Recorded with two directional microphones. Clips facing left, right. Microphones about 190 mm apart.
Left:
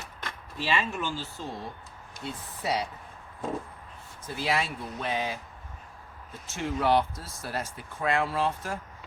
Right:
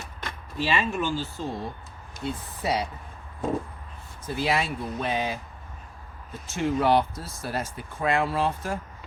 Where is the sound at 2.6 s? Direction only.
10° right (ahead or behind).